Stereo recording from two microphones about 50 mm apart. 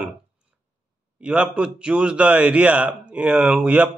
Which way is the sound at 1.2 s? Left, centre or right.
Right.